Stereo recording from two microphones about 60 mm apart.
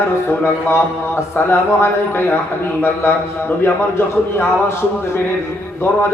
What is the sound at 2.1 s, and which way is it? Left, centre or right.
Speech, left.